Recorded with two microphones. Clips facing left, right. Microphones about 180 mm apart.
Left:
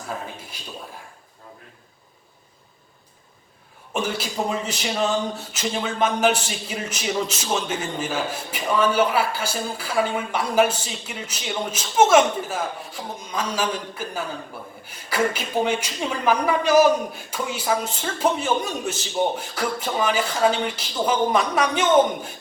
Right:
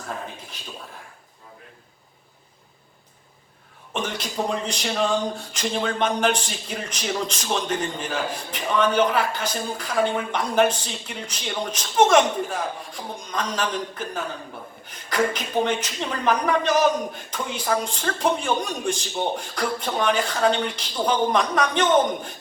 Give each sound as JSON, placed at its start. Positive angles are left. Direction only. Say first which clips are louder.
{"t": 0.5, "sound": "speech", "louder": "even", "side_deg": 10}
{"t": 3.9, "sound": "speech", "louder": "left 2 dB", "side_deg": 5}